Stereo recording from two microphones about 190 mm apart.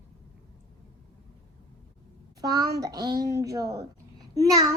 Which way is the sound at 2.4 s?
20° right (ahead or behind).